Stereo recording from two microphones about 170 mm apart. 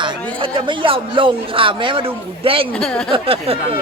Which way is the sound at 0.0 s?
30° right (ahead or behind).